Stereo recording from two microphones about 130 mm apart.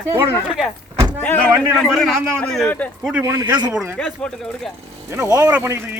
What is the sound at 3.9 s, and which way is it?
Speech, 5° left (ahead or behind).